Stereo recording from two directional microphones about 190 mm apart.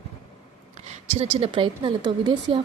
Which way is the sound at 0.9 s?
30° right (ahead or behind).